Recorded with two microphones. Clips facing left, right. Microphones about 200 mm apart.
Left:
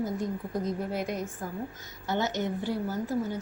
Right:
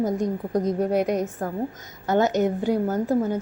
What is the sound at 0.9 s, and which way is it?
Speech, 70° right (ahead or behind).